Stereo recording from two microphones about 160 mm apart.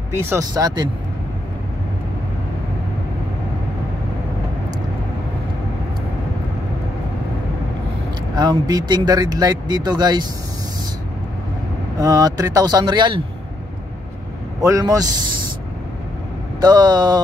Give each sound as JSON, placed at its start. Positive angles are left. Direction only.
{"t": 0.1, "sound": "speech", "side_deg": -15}
{"t": 8.4, "sound": "speech", "side_deg": -25}
{"t": 12.0, "sound": "speech", "side_deg": -20}
{"t": 14.6, "sound": "speech", "side_deg": -20}
{"t": 16.6, "sound": "speech", "side_deg": -25}